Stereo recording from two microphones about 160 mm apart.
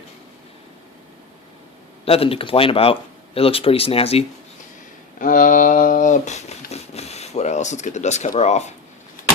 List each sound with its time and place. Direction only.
2.0 s speech: 35° left (ahead or behind)
5.2 s speech: 55° left (ahead or behind)